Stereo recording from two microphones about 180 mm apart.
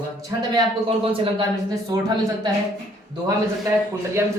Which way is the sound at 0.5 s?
30° right (ahead or behind).